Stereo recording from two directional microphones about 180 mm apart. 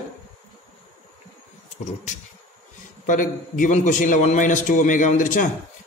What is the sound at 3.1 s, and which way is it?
A man's voice, 45° left (ahead or behind).